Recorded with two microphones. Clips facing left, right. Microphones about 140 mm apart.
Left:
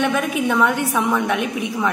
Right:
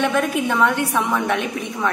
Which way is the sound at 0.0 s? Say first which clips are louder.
Even; centre (ahead or behind).